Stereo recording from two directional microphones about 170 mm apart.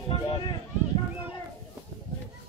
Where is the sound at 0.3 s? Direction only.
25° left (ahead or behind).